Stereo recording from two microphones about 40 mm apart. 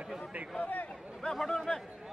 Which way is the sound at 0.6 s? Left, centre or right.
Left.